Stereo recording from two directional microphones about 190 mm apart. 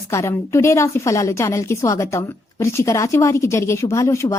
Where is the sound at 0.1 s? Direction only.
15° left (ahead or behind).